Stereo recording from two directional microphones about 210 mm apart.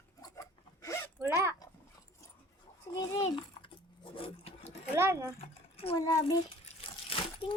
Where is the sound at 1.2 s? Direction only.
10° right (ahead or behind).